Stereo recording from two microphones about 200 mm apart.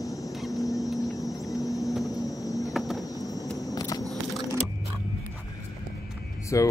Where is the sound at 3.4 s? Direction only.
Centre (ahead or behind).